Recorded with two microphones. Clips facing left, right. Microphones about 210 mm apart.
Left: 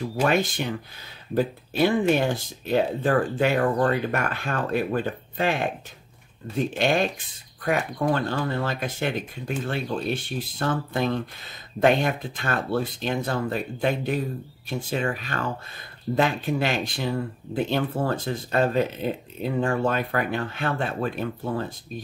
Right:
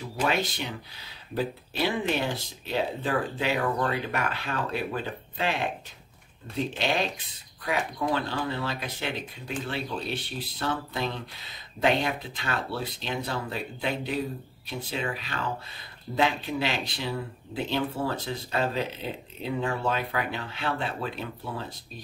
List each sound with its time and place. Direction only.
0.3 s speech: 50° left (ahead or behind)